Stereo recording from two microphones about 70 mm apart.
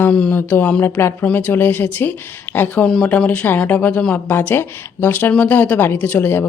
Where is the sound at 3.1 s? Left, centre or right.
Centre.